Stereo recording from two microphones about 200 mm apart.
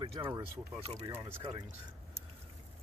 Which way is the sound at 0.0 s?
25° right (ahead or behind).